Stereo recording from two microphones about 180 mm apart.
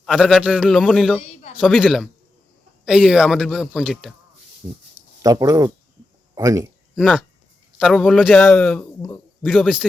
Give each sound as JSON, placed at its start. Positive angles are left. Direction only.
{"t": 0.0, "sound": "a man's voice", "side_deg": 0}
{"t": 4.6, "sound": "speech", "side_deg": -15}
{"t": 7.8, "sound": "a man's voice", "side_deg": 0}